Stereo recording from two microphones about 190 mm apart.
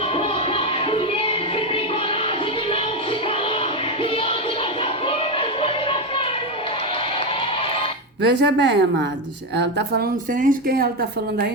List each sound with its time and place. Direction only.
0.2 s music: 30° left (ahead or behind)
5.6 s music: 30° left (ahead or behind)
8.4 s a woman's voice: 65° right (ahead or behind)
10.4 s speech: 50° right (ahead or behind)